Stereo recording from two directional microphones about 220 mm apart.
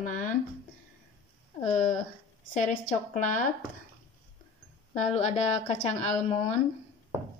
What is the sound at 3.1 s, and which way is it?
Speech, 35° left (ahead or behind).